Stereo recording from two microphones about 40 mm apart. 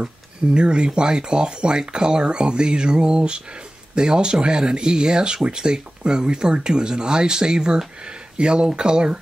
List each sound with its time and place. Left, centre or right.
0.6 s speech: right